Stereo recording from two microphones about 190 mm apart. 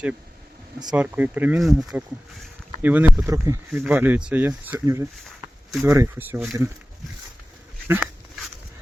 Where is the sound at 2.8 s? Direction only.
10° right (ahead or behind).